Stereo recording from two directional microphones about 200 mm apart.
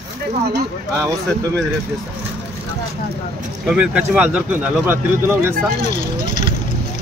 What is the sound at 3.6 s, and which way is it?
Speech, 5° right (ahead or behind).